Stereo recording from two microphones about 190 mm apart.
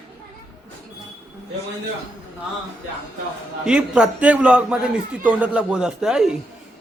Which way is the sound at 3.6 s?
5° right (ahead or behind).